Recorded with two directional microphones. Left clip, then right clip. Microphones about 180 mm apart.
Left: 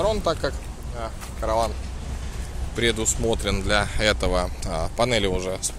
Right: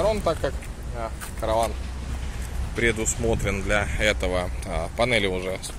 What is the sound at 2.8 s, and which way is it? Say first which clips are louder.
Speech: left 1 dB; 15° left (ahead or behind).